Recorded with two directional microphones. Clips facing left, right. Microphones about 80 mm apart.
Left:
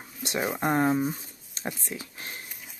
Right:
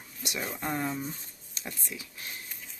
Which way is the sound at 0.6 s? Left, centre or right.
Left.